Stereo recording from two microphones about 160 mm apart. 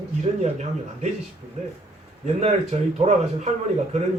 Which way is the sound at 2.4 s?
45° right (ahead or behind).